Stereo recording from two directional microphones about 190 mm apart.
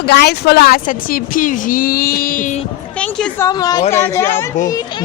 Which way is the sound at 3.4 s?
20° left (ahead or behind).